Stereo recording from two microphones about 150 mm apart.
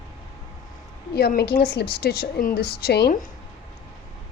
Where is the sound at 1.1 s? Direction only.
90° left.